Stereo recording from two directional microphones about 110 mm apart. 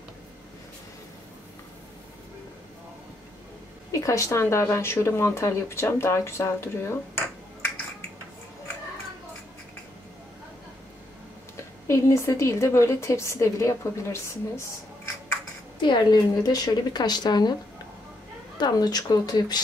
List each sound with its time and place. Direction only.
3.9 s speech: 30° left (ahead or behind)
11.9 s speech: 25° left (ahead or behind)
15.8 s a woman's voice: 40° left (ahead or behind)
18.6 s a woman's voice: 35° left (ahead or behind)